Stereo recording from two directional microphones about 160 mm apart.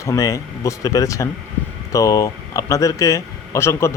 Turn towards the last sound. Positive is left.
turn(degrees=15)  # may be behind; listen again after turning